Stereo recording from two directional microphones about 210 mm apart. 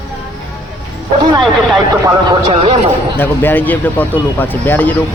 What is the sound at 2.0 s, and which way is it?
Speech, 25° right (ahead or behind).